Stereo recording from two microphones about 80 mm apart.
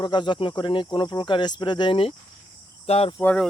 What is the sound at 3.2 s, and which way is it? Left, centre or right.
Speech, centre.